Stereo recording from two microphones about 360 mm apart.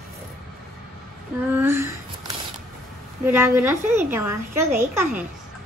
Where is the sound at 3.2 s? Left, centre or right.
Centre.